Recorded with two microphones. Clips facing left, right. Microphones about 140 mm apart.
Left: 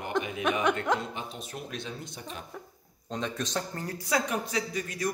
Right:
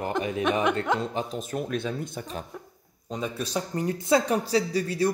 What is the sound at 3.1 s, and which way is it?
Speech, 10° right (ahead or behind).